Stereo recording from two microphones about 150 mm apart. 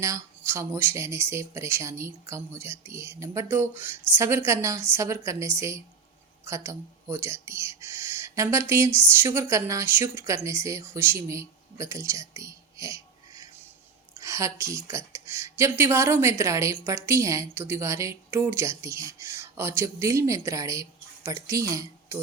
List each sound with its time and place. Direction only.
0.0 s speech: 20° right (ahead or behind)